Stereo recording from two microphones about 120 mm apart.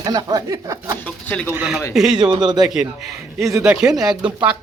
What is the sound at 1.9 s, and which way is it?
Speech, 5° right (ahead or behind).